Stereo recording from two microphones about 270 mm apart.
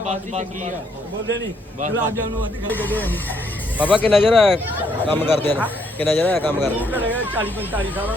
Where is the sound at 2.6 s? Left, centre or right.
Centre.